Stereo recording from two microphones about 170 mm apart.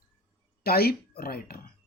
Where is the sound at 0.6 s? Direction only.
65° left (ahead or behind).